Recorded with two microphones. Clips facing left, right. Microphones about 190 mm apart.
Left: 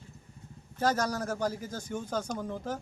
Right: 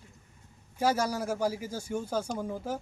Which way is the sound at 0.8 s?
10° right (ahead or behind).